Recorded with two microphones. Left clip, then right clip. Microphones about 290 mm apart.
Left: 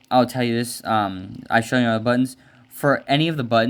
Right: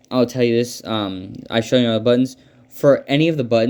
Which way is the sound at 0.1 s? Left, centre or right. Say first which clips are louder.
Right 2 dB; centre.